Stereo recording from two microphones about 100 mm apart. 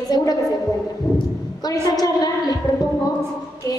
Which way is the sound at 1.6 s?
40° left (ahead or behind).